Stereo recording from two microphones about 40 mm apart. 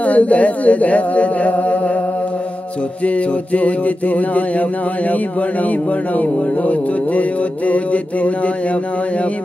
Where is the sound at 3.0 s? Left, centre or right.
Left.